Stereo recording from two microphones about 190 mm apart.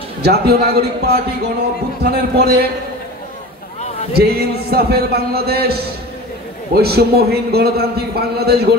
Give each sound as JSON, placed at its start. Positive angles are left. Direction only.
{"t": 0.2, "sound": "a man's voice", "side_deg": -55}
{"t": 4.1, "sound": "a man's voice", "side_deg": -55}